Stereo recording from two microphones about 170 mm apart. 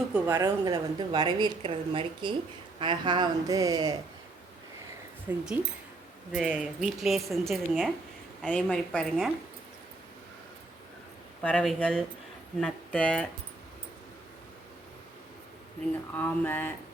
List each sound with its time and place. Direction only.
0.1 s a woman's voice: 10° right (ahead or behind)
0.4 s a woman's voice: 25° right (ahead or behind)
5.3 s a woman's voice: 15° right (ahead or behind); by 9.3 s 5° left (ahead or behind)
11.4 s speech: 5° left (ahead or behind)
16.1 s speech: 10° left (ahead or behind)